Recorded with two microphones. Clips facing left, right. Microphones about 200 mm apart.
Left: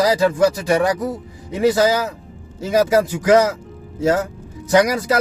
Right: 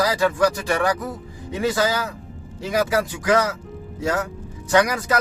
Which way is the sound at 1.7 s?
20° left (ahead or behind).